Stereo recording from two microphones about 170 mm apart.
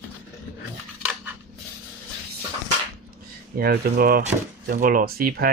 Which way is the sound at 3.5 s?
65° right (ahead or behind).